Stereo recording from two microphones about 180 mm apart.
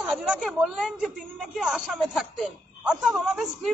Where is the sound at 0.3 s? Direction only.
Centre (ahead or behind).